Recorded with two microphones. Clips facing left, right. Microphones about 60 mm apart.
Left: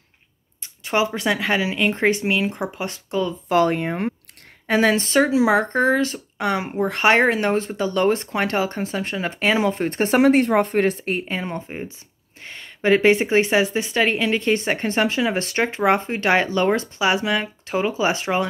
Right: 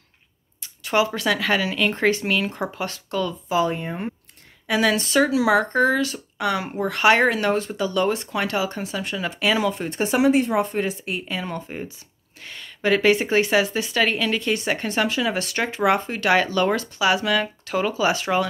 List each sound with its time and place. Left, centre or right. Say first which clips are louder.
0.6 s a woman's voice: even; left
3.4 s speech: left 6 dB; left
4.6 s speech: left 2 dB; left
11.4 s a woman's voice: left 1 dB; left
12.4 s a woman's voice: left 2 dB; left